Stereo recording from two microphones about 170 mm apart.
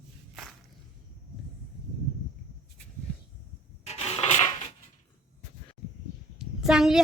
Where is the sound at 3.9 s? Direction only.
40° left (ahead or behind).